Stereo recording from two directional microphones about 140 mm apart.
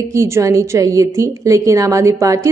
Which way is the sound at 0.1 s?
20° right (ahead or behind).